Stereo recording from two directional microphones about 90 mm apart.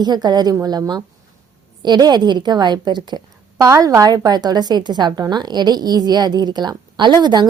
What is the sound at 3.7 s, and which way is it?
A woman's voice, 35° right (ahead or behind).